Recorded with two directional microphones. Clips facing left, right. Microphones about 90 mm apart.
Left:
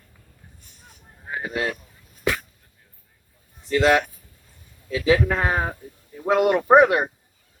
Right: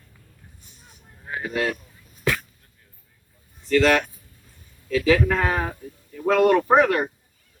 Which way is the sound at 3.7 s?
15° left (ahead or behind).